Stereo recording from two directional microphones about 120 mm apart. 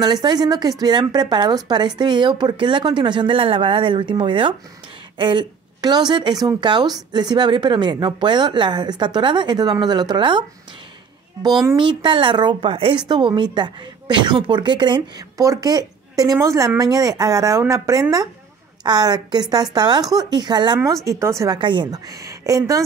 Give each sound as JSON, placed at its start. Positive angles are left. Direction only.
{"t": 0.0, "sound": "a woman's voice", "side_deg": -35}
{"t": 11.7, "sound": "speech", "side_deg": -40}
{"t": 13.1, "sound": "a woman's voice", "side_deg": -40}
{"t": 21.5, "sound": "a woman's voice", "side_deg": -40}